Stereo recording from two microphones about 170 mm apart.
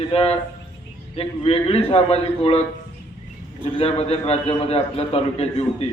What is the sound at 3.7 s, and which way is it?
A man's voice, 35° left (ahead or behind).